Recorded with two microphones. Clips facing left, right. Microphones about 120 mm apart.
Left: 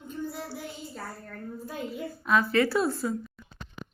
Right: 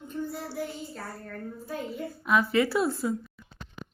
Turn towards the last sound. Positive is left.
turn(degrees=0)  # may be behind; listen again after turning